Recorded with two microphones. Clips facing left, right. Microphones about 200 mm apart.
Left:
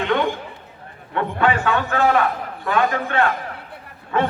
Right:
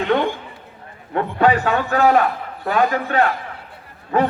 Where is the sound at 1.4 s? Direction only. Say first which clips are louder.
Right 3 dB; 40° right (ahead or behind).